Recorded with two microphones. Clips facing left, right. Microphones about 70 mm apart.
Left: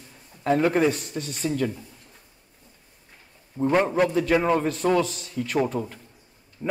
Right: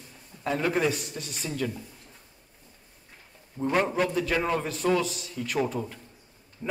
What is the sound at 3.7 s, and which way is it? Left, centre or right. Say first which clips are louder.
Speech: left 4 dB; centre.